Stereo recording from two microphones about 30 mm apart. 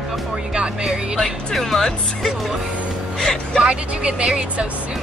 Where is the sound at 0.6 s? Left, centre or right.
Right.